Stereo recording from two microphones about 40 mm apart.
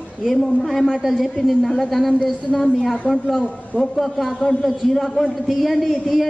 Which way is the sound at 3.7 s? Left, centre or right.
Centre.